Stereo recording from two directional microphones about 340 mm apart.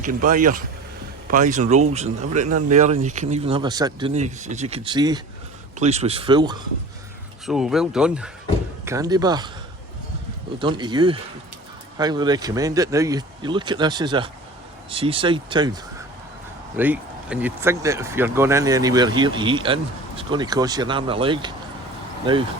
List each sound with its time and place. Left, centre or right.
0.0 s speech: right
7.4 s speech: centre
10.6 s speech: centre